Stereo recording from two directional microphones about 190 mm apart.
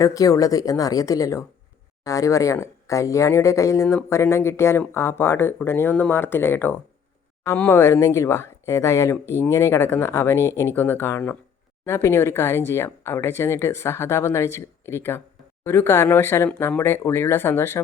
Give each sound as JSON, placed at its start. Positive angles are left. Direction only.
{"t": 0.0, "sound": "speech", "side_deg": 20}